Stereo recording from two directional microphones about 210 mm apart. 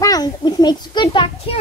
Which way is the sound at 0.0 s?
20° left (ahead or behind).